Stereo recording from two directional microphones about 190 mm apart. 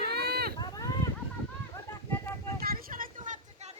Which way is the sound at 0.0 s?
55° right (ahead or behind).